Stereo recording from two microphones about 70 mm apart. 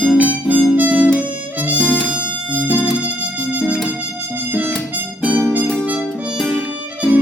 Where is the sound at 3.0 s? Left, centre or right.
Centre.